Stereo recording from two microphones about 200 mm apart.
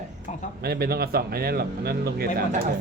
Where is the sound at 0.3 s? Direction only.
35° left (ahead or behind).